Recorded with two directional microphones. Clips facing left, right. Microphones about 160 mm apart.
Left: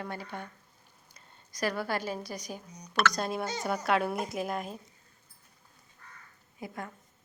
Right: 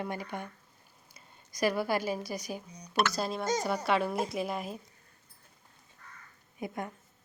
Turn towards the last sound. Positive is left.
turn(degrees=-20)  # may be behind; listen again after turning